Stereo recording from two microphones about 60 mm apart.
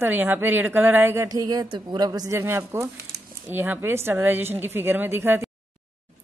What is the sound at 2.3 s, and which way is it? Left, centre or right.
Speech, right.